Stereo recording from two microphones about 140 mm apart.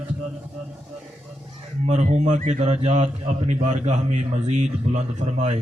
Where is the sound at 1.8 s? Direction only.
55° right (ahead or behind).